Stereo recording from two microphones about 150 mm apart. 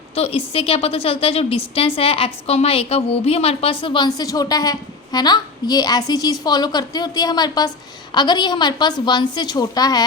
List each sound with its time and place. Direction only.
0.2 s a woman's voice: 40° left (ahead or behind)